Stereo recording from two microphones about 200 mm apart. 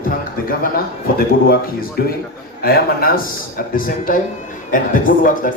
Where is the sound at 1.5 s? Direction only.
45° left (ahead or behind).